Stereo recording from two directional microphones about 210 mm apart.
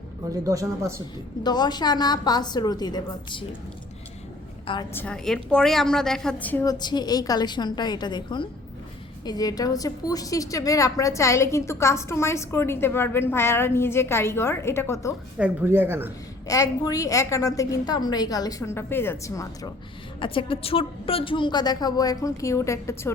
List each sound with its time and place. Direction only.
0.4 s speech: 15° right (ahead or behind)
1.5 s a woman's voice: 20° left (ahead or behind)
4.6 s a woman's voice: 25° left (ahead or behind)
4.9 s a woman's voice: 5° left (ahead or behind)
15.4 s speech: 10° right (ahead or behind)
16.5 s a woman's voice: 15° left (ahead or behind)